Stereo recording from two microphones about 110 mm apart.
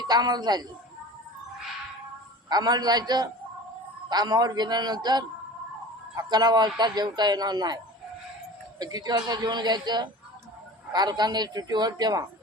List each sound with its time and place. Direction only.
0.0 s speech: 40° right (ahead or behind)
2.5 s speech: 40° right (ahead or behind)
8.8 s speech: 35° right (ahead or behind)